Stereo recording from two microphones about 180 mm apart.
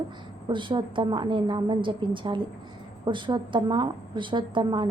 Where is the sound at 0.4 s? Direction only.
25° right (ahead or behind).